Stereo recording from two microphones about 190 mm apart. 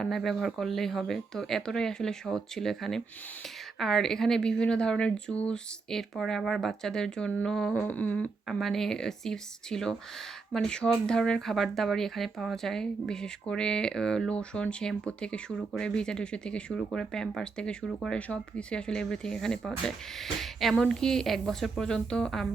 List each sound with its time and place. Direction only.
0.0 s speech: centre (ahead or behind)